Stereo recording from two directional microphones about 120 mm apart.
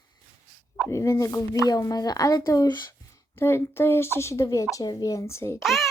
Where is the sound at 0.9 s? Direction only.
25° left (ahead or behind).